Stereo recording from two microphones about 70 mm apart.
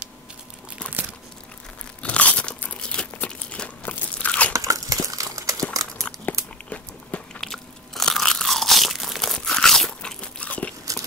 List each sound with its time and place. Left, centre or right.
2.0 s crumpling: centre
3.8 s crunch: left
4.5 s a sound: right
6.0 s biting: left
7.3 s crunch: centre
10.2 s crunch: centre